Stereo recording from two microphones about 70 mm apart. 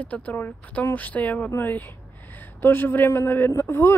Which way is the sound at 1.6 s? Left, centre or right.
Left.